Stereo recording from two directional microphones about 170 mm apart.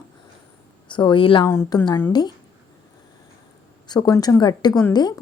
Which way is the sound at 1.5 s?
15° left (ahead or behind).